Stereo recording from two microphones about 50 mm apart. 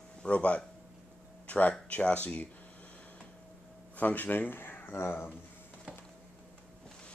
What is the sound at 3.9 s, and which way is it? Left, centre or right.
Speech, left.